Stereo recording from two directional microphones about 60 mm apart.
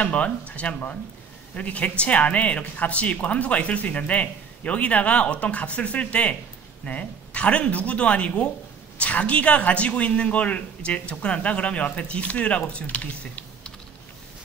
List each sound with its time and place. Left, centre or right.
0.0 s speech: left